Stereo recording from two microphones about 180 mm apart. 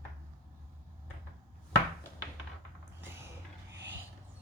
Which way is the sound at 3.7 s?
80° right.